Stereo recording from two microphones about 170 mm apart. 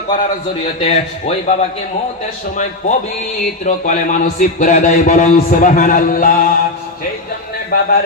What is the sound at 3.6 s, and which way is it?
Speech, 50° left (ahead or behind).